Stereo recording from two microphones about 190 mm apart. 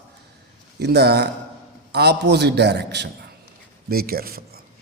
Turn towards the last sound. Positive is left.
turn(degrees=-55)  # may be behind; listen again after turning